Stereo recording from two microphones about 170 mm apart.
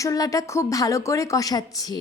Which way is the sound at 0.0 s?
20° left (ahead or behind).